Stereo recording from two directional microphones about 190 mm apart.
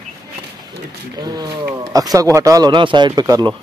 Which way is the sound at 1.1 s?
20° right (ahead or behind).